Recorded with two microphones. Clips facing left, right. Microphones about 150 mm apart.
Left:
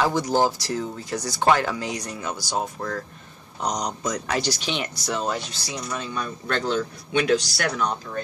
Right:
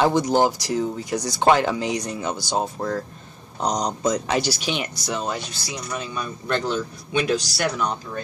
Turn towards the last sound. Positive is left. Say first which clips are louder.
# right 1 dB
turn(degrees=-5)  # may be behind; listen again after turning